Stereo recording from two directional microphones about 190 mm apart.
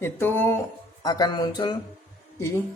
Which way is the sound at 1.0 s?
20° left (ahead or behind).